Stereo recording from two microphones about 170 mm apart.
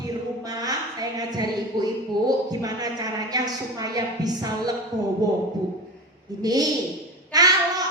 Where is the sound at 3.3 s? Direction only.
20° right (ahead or behind).